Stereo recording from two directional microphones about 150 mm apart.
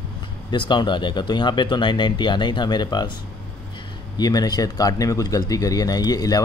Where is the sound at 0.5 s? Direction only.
30° left (ahead or behind).